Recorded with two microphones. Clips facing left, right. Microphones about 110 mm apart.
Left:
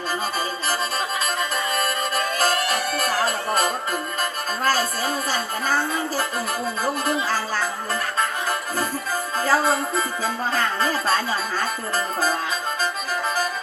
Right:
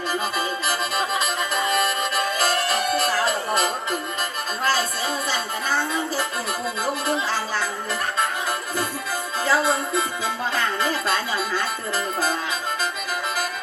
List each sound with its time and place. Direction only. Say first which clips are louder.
0.7 s music: even; 40° left (ahead or behind)
3.2 s music: even; 45° left (ahead or behind)
9.4 s speech: left 1 dB; 40° left (ahead or behind)